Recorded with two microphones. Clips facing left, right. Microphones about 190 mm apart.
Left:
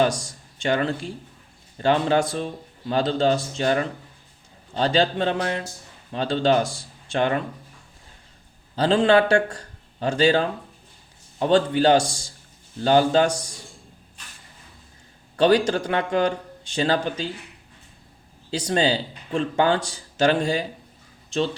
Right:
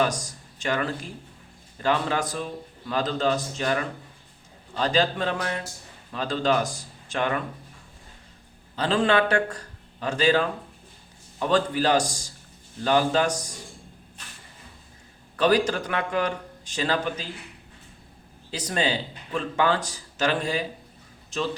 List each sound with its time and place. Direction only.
0.2 s a sound: 30° left (ahead or behind)
1.8 s speech: 30° left (ahead or behind)
8.7 s a man's voice: 30° left (ahead or behind)
15.4 s speech: 30° left (ahead or behind)
18.5 s speech: 30° left (ahead or behind)